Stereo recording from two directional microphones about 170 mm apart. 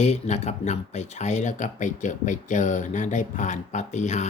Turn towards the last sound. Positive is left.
turn(degrees=45)  # may be behind; listen again after turning